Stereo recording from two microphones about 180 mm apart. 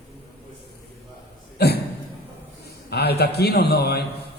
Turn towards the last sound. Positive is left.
turn(degrees=65)  # may be behind; listen again after turning